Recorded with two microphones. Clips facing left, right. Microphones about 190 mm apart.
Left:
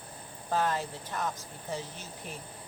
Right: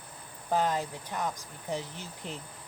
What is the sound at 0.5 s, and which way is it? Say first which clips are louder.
Speech: right 1 dB; 15° right (ahead or behind).